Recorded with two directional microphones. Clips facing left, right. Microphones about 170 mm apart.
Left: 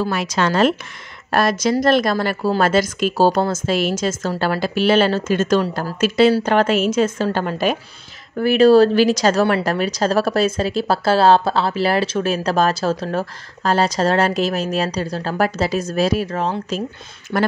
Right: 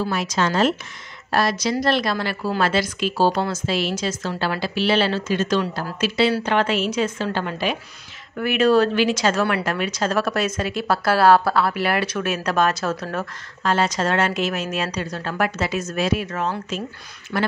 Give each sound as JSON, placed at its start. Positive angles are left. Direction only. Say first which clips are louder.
{"t": 0.1, "sound": "a woman's voice", "louder": "left 3 dB", "side_deg": 65}
{"t": 8.4, "sound": "a woman's voice", "louder": "left 6 dB", "side_deg": 35}
{"t": 17.3, "sound": "a woman's voice", "louder": "left 4 dB", "side_deg": 45}